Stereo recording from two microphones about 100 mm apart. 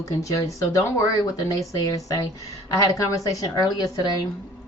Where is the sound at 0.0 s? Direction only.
35° left (ahead or behind).